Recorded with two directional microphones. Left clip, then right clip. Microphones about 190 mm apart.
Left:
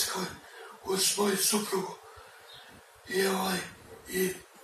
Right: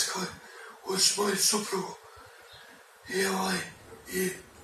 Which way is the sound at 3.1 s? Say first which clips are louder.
Even; centre (ahead or behind).